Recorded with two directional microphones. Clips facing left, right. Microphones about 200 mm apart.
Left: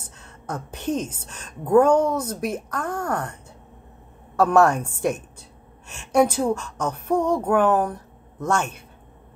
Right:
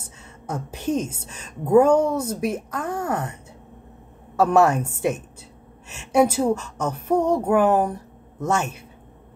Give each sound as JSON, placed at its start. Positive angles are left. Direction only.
{"t": 0.2, "sound": "a woman's voice", "side_deg": -5}
{"t": 4.4, "sound": "a woman's voice", "side_deg": -5}
{"t": 7.2, "sound": "speech", "side_deg": -25}
{"t": 7.4, "sound": "speech", "side_deg": -10}